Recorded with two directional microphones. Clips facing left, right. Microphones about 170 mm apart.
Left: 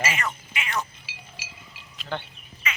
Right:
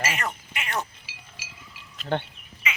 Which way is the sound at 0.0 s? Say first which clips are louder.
Left 1 dB; 55° right (ahead or behind).